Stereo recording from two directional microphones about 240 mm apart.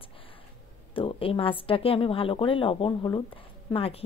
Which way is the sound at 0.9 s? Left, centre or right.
Left.